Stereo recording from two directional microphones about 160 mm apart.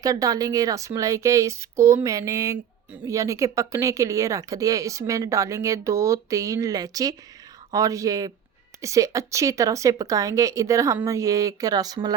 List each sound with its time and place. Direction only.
0.0 s speech: 20° right (ahead or behind)